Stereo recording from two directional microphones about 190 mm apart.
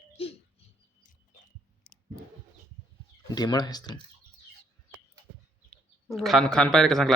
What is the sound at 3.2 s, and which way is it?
Speech, 20° left (ahead or behind).